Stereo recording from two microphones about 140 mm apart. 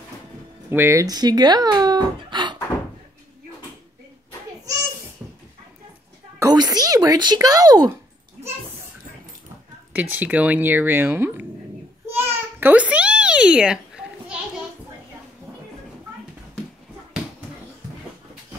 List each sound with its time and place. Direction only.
0.7 s speech: 15° right (ahead or behind)
5.2 s a sound: 10° right (ahead or behind)
6.4 s speech: 30° right (ahead or behind)
9.9 s speech: 10° right (ahead or behind)
12.2 s babbling: 15° right (ahead or behind)